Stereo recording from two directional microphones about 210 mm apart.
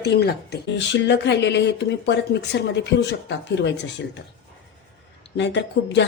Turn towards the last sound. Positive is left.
turn(degrees=55)  # may be behind; listen again after turning